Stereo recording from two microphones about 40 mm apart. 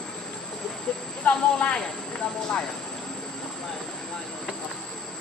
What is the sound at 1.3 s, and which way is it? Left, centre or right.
Speech, left.